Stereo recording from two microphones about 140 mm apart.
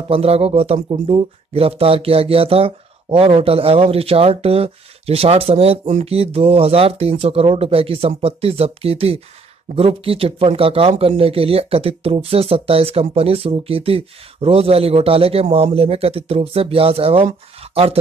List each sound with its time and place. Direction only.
0.1 s speech: 45° right (ahead or behind)